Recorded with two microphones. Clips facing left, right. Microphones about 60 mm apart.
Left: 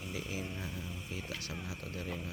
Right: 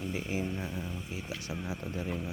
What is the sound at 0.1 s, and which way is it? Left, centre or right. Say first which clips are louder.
Speech: right 4 dB; right.